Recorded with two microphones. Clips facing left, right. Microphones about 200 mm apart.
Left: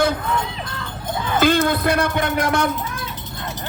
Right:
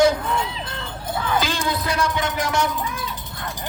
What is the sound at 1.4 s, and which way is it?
Speech, 55° left (ahead or behind).